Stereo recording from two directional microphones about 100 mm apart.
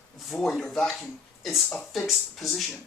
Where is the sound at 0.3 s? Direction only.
Centre (ahead or behind).